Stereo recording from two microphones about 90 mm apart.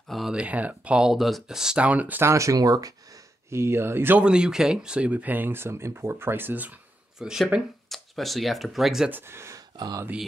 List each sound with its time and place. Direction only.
0.1 s a sound: centre (ahead or behind)
0.4 s speech: 15° right (ahead or behind)
2.2 s speech: 35° right (ahead or behind)
4.2 s speech: 10° right (ahead or behind)
7.2 s speech: 5° right (ahead or behind)
9.1 s speech: 25° right (ahead or behind)
9.8 s speech: 50° right (ahead or behind)